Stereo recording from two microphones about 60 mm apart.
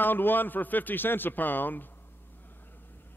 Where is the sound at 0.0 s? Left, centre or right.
Left.